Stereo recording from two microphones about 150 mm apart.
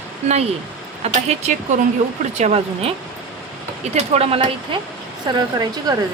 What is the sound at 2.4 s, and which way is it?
Speech, 40° right (ahead or behind).